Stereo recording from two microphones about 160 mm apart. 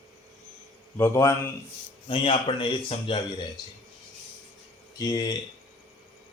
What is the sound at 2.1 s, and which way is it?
Speech, 30° left (ahead or behind).